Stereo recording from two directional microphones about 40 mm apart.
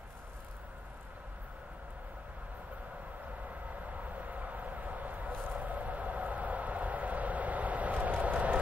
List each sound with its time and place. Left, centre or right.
3.4 s vehicle: right